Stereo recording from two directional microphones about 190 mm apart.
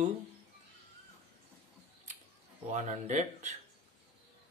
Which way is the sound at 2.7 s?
40° right (ahead or behind).